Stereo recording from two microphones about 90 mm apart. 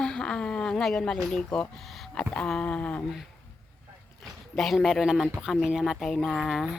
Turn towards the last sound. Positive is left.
turn(degrees=-5)  # may be behind; listen again after turning